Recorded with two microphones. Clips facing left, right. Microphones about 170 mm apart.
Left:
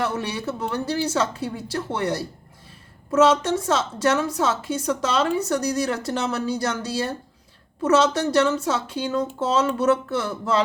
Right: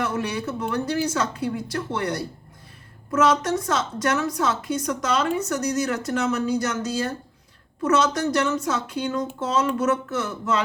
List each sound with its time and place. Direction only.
0.0 s a woman's voice: 30° left (ahead or behind)